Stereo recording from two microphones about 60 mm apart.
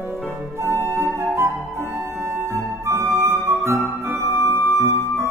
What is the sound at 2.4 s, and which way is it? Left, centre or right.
Flute, right.